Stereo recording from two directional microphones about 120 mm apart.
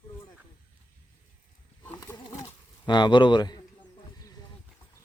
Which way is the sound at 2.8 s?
40° left (ahead or behind).